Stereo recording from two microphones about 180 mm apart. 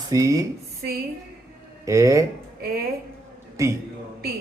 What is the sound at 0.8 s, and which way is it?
Speech, 55° right (ahead or behind).